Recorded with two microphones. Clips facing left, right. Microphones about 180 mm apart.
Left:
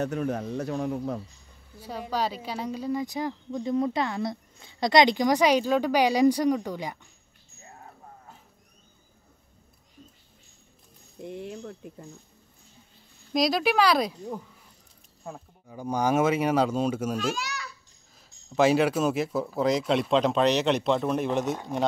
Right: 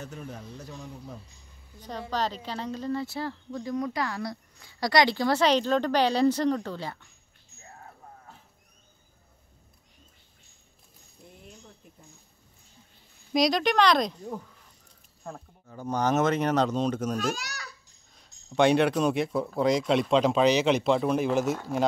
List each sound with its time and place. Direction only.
0.0 s speech: 70° left (ahead or behind)
1.8 s speech: 10° left (ahead or behind)
11.1 s speech: 80° left
13.3 s speech: centre (ahead or behind)
17.2 s a child's voice: 40° right (ahead or behind)
18.1 s speech: 5° left (ahead or behind)